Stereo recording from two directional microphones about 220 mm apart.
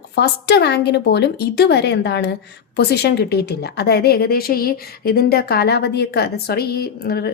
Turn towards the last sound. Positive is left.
turn(degrees=45)  # may be behind; listen again after turning